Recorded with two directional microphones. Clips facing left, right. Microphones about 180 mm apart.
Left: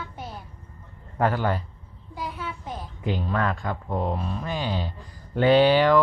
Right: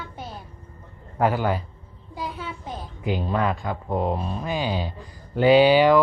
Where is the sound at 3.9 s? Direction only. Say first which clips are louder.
Right 3 dB; 15° right (ahead or behind).